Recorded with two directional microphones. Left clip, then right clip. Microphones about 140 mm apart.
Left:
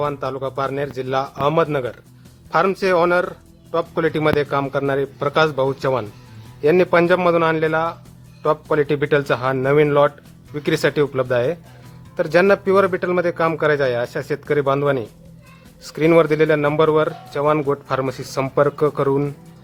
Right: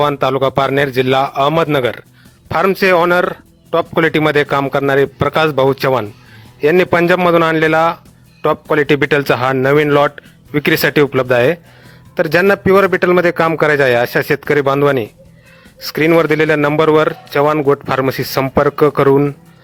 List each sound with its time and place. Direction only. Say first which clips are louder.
0.0 s a man's voice: right 10 dB; 50° right (ahead or behind)